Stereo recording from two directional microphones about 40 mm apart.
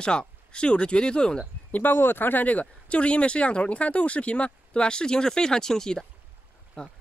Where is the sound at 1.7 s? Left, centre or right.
Left.